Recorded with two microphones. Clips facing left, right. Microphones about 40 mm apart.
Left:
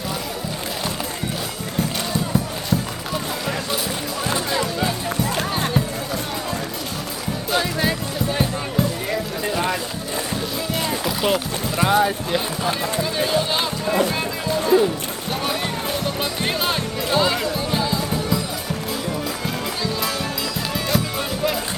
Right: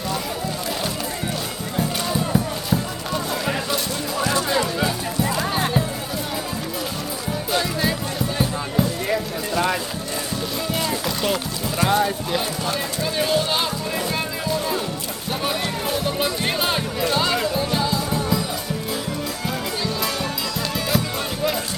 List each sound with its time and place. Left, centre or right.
2.1 s music: centre
4.2 s music: left
4.5 s music: centre
7.5 s music: centre
10.8 s music: centre
11.8 s speech: centre
14.4 s music: centre